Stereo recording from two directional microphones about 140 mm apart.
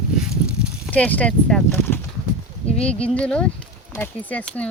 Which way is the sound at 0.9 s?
10° left (ahead or behind).